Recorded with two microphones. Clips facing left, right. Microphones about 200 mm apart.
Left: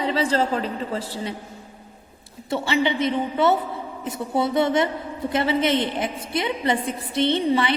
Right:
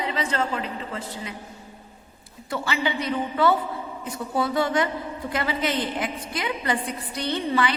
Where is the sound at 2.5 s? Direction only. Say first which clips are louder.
Left 5 dB; 25° left (ahead or behind).